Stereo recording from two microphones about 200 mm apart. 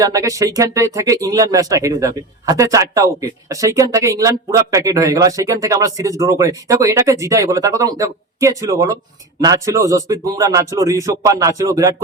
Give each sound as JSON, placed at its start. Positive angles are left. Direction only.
{"t": 0.0, "sound": "speech", "side_deg": -15}